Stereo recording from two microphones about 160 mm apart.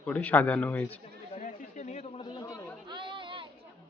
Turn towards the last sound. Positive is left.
turn(degrees=-30)  # may be behind; listen again after turning